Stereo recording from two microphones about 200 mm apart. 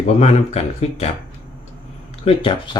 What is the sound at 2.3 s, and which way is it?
Speech, 25° left (ahead or behind).